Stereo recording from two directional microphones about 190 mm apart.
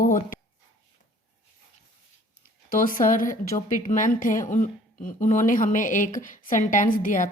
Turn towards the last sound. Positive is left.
turn(degrees=45)  # may be behind; listen again after turning